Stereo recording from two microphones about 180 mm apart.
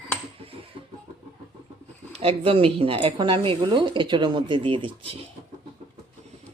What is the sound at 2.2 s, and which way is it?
Speech, 30° right (ahead or behind).